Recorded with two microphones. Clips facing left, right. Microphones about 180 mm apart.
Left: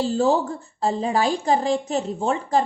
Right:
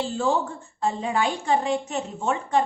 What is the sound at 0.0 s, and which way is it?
A woman's voice, 40° left (ahead or behind).